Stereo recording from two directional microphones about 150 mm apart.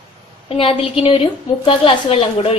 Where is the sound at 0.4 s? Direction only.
40° left (ahead or behind).